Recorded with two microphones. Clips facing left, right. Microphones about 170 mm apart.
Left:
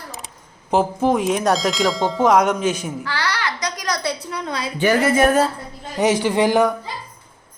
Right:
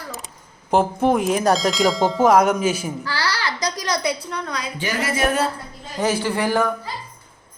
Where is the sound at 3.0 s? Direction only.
35° right (ahead or behind).